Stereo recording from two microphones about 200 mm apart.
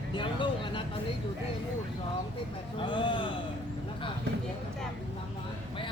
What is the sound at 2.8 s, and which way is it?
Speech, 25° left (ahead or behind).